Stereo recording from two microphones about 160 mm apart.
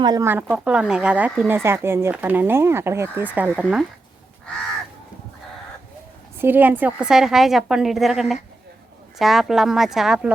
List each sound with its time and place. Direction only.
0.0 s speech: 25° right (ahead or behind)
0.5 s speech: 5° right (ahead or behind)
6.4 s a woman's voice: 10° right (ahead or behind)